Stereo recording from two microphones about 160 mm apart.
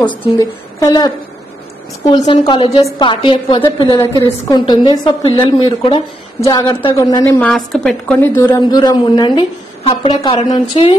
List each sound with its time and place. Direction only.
0.4 s a woman's voice: 25° left (ahead or behind)
7.3 s a woman's voice: 5° left (ahead or behind)
8.2 s a woman's voice: 15° left (ahead or behind); by 11.0 s 35° left (ahead or behind)